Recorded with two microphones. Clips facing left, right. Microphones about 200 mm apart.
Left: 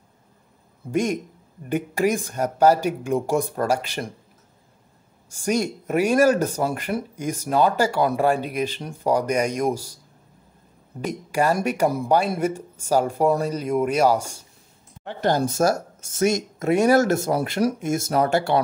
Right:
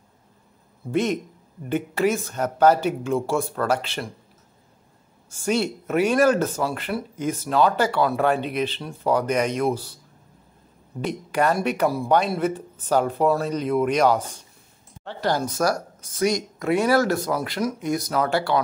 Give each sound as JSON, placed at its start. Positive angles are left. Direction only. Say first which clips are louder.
{"t": 0.9, "sound": "speech", "louder": "even", "side_deg": 10}
{"t": 5.3, "sound": "speech", "louder": "even", "side_deg": 15}
{"t": 11.1, "sound": "speech", "louder": "even", "side_deg": 10}
{"t": 16.7, "sound": "speech", "louder": "left 2 dB", "side_deg": 45}
{"t": 17.1, "sound": "speech", "louder": "left 2 dB", "side_deg": 25}